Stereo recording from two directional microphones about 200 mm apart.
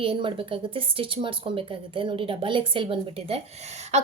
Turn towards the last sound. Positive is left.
turn(degrees=-35)  # may be behind; listen again after turning